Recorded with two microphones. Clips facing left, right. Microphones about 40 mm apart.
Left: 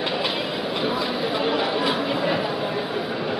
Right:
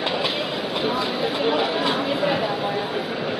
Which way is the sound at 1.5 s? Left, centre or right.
Centre.